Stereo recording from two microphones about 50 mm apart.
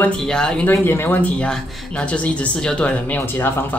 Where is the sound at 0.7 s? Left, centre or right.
Left.